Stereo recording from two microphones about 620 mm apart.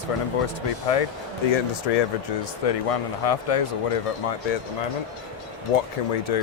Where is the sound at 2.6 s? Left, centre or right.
Left.